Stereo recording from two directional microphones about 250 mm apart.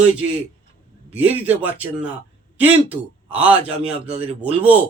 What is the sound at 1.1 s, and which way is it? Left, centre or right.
Speech, centre.